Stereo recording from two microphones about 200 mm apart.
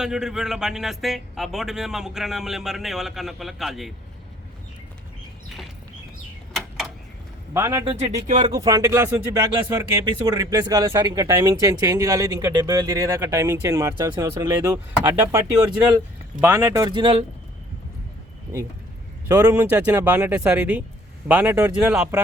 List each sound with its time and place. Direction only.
0.0 s speech: 5° right (ahead or behind)
6.5 s a sound: centre (ahead or behind)
7.5 s speech: 10° right (ahead or behind)
7.9 s speech: 35° right (ahead or behind)
8.4 s speech: 20° right (ahead or behind)
19.5 s speech: 10° right (ahead or behind)